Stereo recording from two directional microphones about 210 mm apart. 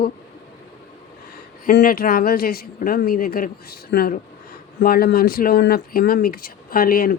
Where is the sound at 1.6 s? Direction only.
40° left (ahead or behind).